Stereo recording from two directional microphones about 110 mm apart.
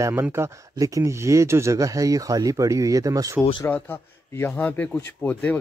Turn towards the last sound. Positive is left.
turn(degrees=15)  # may be behind; listen again after turning